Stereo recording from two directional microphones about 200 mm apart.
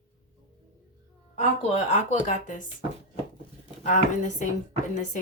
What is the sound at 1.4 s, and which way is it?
Speech, 35° left (ahead or behind).